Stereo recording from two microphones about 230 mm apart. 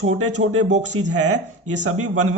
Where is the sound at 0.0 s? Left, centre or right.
Right.